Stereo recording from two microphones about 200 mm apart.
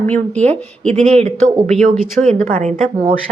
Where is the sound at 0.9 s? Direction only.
35° right (ahead or behind).